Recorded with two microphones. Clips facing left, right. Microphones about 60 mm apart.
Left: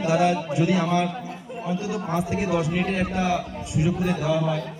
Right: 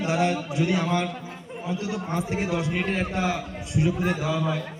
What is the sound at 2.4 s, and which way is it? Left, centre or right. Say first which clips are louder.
Speech: left 5 dB; centre.